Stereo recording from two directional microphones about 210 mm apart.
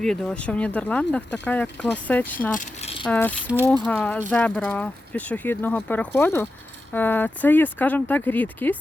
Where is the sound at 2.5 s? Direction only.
35° left (ahead or behind).